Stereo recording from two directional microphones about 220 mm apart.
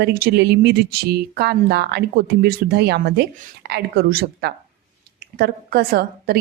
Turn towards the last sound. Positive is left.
turn(degrees=-45)  # may be behind; listen again after turning